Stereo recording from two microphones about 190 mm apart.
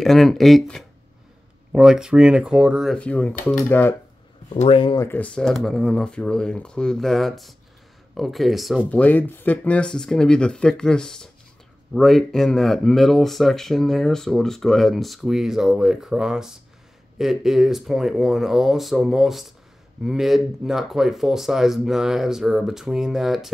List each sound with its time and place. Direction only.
0.0 s speech: centre (ahead or behind)
4.6 s speech: 30° left (ahead or behind)
5.0 s speech: 10° left (ahead or behind)